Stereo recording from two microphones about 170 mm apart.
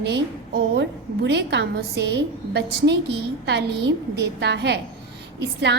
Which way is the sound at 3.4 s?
90° right.